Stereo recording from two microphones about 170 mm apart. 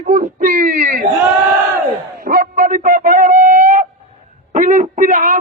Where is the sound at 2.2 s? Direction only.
55° right (ahead or behind).